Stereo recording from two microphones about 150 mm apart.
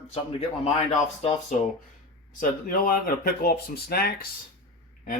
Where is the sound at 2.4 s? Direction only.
70° left (ahead or behind); by 4.3 s 90° left.